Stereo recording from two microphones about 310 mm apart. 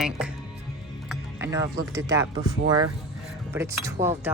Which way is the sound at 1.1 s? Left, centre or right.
Centre.